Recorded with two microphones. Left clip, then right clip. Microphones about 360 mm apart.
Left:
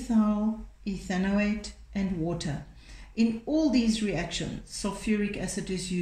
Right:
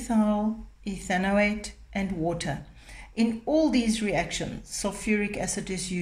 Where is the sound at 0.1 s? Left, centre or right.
Centre.